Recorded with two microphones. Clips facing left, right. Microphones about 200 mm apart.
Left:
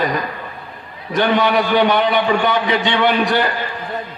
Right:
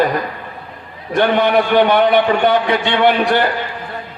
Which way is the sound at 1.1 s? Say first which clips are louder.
Right 2 dB; 55° right (ahead or behind).